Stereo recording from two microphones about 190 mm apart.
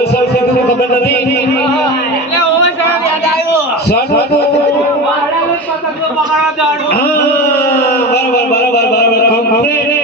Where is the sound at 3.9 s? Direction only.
60° left (ahead or behind).